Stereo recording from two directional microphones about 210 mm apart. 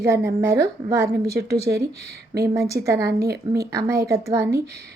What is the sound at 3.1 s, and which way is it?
Speech, 50° right (ahead or behind).